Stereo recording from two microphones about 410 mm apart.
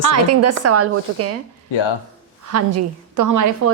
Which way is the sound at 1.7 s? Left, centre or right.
Left.